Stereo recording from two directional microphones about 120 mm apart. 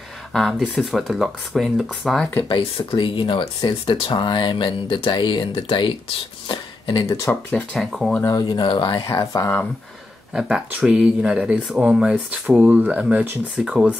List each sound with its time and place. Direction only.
0.3 s speech: centre (ahead or behind)
2.4 s speech: 45° left (ahead or behind)
6.4 s a sound: 45° left (ahead or behind)
7.1 s speech: 25° left (ahead or behind)
7.7 s speech: centre (ahead or behind)
8.2 s speech: 30° left (ahead or behind)
10.3 s speech: 10° right (ahead or behind)